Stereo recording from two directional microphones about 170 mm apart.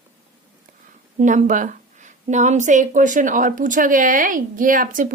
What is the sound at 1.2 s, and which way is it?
A woman's voice, 50° right (ahead or behind).